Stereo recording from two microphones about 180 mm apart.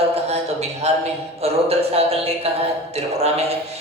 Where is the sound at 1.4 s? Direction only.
35° right (ahead or behind).